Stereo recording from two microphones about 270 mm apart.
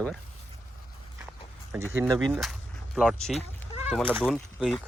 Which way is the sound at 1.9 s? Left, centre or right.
Centre.